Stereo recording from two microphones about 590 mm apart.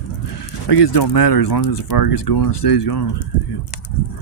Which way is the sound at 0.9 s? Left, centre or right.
Left.